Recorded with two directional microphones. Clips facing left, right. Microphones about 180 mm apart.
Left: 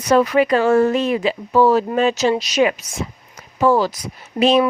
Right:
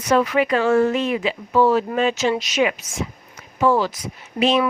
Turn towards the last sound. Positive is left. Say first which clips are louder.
# left 4 dB
turn(degrees=35)  # may be behind; listen again after turning